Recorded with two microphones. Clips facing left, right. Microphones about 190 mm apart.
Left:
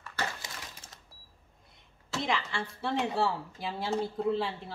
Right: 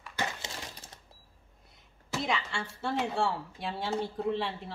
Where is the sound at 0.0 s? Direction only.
15° right (ahead or behind).